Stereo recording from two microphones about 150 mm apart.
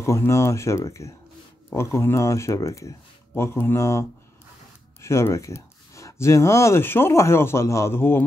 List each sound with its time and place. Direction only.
0.0 s speech: 20° left (ahead or behind)
5.0 s speech: 20° left (ahead or behind)